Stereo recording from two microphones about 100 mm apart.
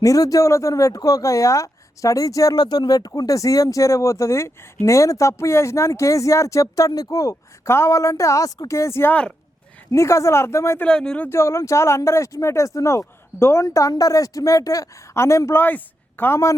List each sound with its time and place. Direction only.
0.0 s speech: 35° left (ahead or behind)
10.8 s speech: 10° left (ahead or behind)
11.3 s speech: 30° left (ahead or behind)